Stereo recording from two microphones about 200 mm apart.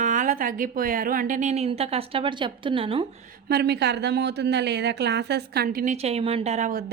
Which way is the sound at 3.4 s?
55° right (ahead or behind).